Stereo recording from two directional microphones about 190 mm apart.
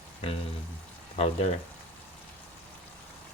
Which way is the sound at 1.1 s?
35° left (ahead or behind).